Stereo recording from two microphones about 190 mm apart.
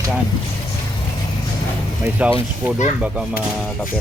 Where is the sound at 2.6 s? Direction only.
5° right (ahead or behind).